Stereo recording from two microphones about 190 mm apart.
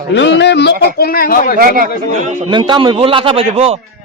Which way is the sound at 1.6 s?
45° right (ahead or behind).